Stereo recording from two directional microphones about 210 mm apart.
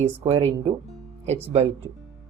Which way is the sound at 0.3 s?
25° right (ahead or behind).